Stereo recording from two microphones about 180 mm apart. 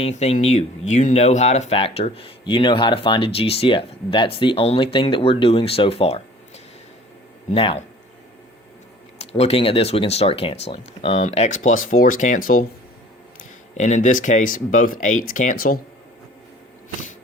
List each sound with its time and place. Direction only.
0.0 s speech: 35° left (ahead or behind)
7.5 s speech: 30° left (ahead or behind)
9.1 s speech: 35° left (ahead or behind)
13.7 s speech: 40° left (ahead or behind)